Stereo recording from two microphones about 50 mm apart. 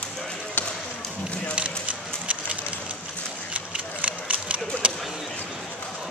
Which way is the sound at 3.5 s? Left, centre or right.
Right.